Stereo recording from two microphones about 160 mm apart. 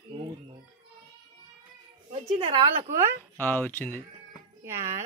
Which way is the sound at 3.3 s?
10° left (ahead or behind).